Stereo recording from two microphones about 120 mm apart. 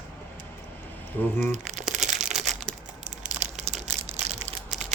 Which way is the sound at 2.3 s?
Centre (ahead or behind).